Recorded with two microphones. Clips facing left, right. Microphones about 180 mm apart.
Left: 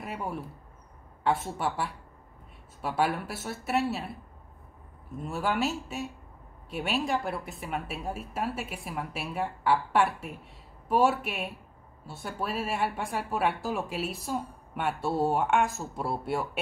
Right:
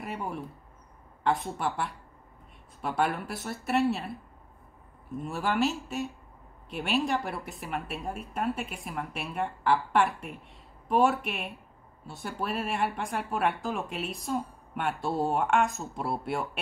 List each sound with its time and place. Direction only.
0.0 s a woman's voice: centre (ahead or behind)
5.2 s a woman's voice: centre (ahead or behind)